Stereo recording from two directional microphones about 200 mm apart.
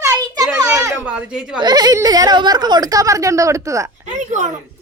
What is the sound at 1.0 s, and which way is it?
Speech, 5° right (ahead or behind).